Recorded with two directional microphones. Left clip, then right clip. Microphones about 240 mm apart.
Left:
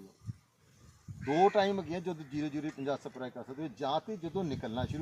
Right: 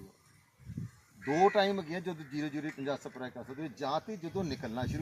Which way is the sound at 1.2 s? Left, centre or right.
Centre.